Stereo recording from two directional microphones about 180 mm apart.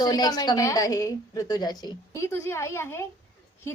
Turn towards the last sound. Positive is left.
turn(degrees=15)  # may be behind; listen again after turning